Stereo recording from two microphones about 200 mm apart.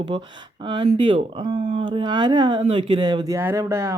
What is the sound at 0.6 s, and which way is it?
Speech, 25° right (ahead or behind).